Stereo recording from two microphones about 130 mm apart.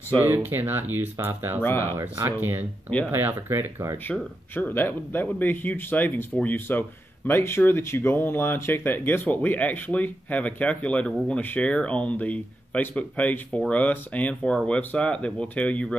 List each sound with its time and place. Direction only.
0.2 s speech: 15° right (ahead or behind)
1.6 s speech: 20° left (ahead or behind)
2.0 s speech: 20° right (ahead or behind)
4.1 s speech: 15° left (ahead or behind)